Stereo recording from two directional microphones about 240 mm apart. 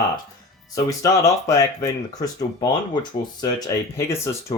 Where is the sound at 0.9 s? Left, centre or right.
Centre.